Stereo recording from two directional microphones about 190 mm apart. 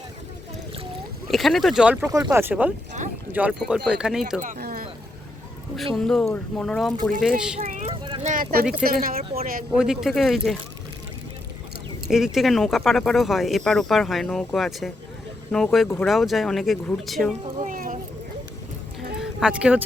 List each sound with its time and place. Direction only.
1.3 s speech: centre (ahead or behind)
2.0 s speech: 15° right (ahead or behind)
4.4 s a sound: 45° right (ahead or behind)
5.7 s speech: centre (ahead or behind)
7.7 s vehicle: 40° right (ahead or behind)
8.2 s a sound: 45° right (ahead or behind)
8.8 s speech: 50° right (ahead or behind)
9.7 s speech: 5° right (ahead or behind)
12.0 s speech: centre (ahead or behind)
17.6 s a sound: 45° right (ahead or behind)
19.2 s speech: 5° right (ahead or behind)